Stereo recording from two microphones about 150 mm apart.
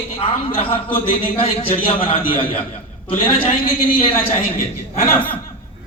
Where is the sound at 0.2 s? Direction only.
35° left (ahead or behind).